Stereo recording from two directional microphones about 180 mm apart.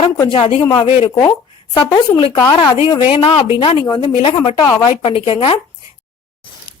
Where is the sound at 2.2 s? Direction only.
30° left (ahead or behind).